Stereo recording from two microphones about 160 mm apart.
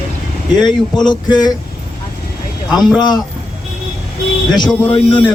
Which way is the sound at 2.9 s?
25° left (ahead or behind).